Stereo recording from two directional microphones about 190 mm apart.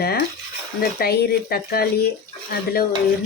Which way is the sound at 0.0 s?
55° left (ahead or behind).